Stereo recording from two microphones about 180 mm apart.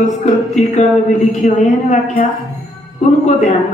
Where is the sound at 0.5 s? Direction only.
40° left (ahead or behind).